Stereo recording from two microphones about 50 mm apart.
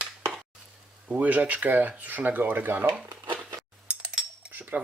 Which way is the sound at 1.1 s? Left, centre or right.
Right.